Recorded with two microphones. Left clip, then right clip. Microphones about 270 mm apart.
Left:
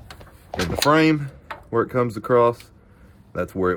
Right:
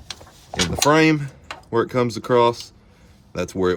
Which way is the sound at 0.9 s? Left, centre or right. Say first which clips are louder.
Right 1 dB; right.